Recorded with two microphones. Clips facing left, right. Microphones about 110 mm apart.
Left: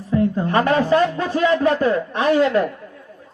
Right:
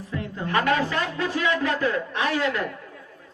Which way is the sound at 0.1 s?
35° left (ahead or behind).